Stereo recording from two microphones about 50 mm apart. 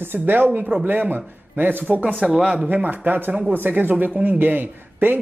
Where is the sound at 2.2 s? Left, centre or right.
Centre.